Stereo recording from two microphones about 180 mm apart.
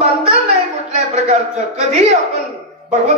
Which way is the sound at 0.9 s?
35° right (ahead or behind).